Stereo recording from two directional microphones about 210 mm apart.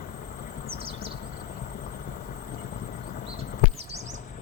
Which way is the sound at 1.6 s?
45° left (ahead or behind).